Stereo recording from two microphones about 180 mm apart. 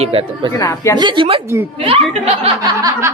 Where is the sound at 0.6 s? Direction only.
20° left (ahead or behind).